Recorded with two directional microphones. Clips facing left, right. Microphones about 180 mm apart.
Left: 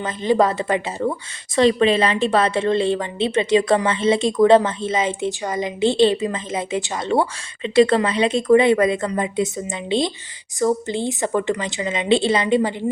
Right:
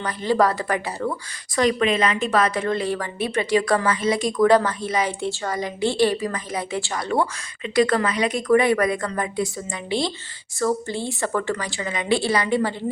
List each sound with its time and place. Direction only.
0.0 s a woman's voice: 20° left (ahead or behind)